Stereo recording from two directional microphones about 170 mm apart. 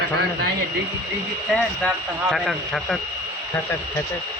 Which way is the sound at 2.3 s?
Centre (ahead or behind).